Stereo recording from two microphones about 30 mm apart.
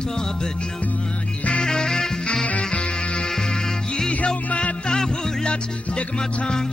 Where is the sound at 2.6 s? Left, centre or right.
Left.